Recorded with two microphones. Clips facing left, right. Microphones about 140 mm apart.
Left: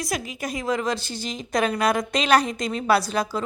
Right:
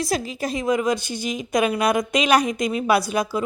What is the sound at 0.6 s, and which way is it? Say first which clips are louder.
A woman's voice: right 4 dB; 15° right (ahead or behind).